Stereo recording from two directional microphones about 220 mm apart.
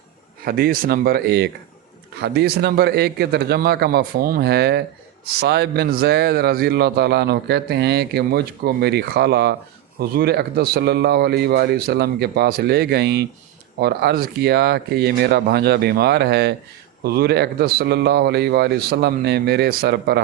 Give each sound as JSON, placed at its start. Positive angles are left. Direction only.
{"t": 0.4, "sound": "speech", "side_deg": -45}